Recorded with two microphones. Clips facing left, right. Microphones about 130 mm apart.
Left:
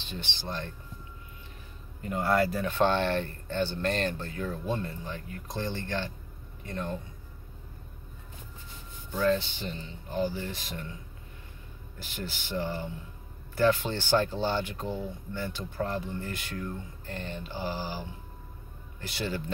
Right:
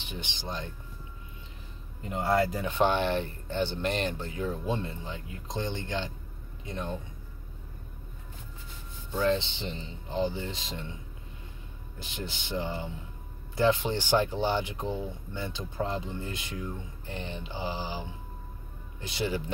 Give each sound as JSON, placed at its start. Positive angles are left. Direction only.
{"t": 0.0, "sound": "speech", "side_deg": -15}
{"t": 2.0, "sound": "speech", "side_deg": -20}
{"t": 9.1, "sound": "speech", "side_deg": -25}
{"t": 12.0, "sound": "speech", "side_deg": -20}